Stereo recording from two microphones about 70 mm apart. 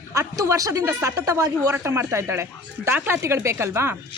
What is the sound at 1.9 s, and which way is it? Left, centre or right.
A woman's voice, right.